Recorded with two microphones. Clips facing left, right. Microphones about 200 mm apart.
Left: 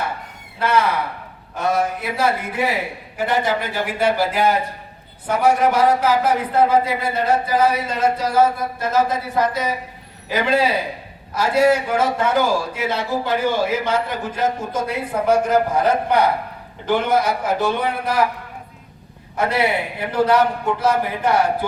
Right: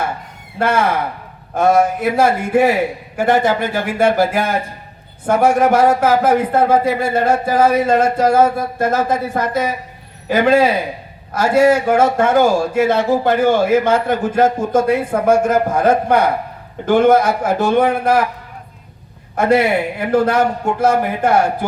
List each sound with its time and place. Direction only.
0.6 s speech: 50° right (ahead or behind)
19.4 s speech: 50° right (ahead or behind)